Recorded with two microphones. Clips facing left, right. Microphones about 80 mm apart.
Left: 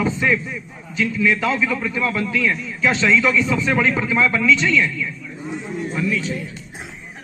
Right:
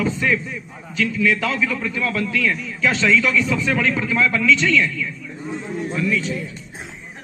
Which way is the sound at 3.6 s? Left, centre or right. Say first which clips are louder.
Left 1 dB; left.